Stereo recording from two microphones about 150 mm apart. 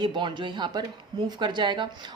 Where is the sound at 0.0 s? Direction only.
35° right (ahead or behind).